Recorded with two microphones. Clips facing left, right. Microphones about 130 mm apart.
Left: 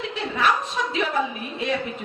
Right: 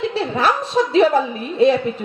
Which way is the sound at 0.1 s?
30° right (ahead or behind).